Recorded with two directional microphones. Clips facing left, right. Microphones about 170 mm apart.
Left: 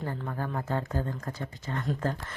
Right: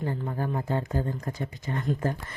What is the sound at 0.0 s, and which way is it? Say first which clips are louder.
Speech: right 3 dB; 20° right (ahead or behind).